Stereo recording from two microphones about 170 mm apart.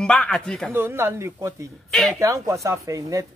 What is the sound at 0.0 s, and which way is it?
Speech, 5° left (ahead or behind).